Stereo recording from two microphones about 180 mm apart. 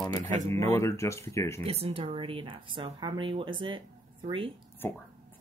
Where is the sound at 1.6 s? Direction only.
35° right (ahead or behind).